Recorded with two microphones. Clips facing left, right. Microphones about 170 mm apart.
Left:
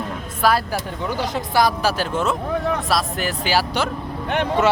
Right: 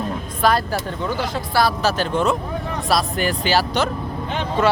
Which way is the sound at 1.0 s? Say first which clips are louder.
Even; 15° left (ahead or behind).